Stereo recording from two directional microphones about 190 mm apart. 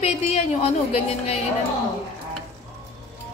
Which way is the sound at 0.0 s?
35° left (ahead or behind).